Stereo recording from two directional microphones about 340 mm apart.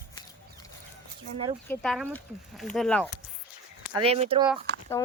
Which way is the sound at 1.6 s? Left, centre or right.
Centre.